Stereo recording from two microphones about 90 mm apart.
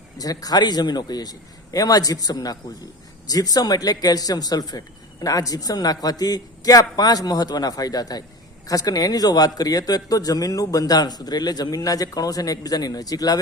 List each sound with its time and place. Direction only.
0.2 s a man's voice: 45° left (ahead or behind)